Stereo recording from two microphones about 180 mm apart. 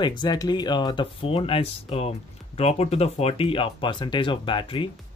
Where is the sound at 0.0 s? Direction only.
25° left (ahead or behind).